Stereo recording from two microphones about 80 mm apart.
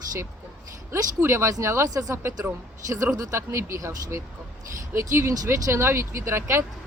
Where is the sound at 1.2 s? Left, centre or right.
Right.